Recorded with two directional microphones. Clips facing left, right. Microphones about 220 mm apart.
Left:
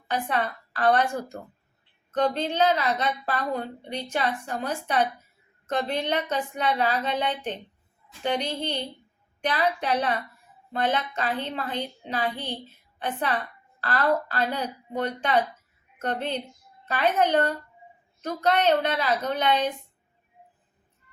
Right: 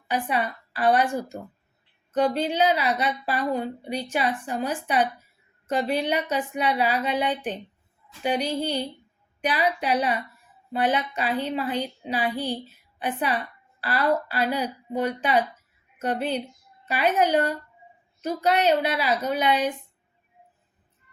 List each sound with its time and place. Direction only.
0.1 s a woman's voice: 10° right (ahead or behind)